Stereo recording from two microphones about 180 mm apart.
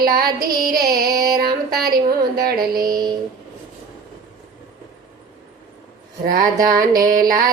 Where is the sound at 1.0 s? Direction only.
20° right (ahead or behind).